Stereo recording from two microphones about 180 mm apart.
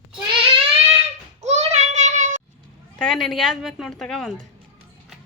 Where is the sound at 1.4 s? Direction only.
40° right (ahead or behind).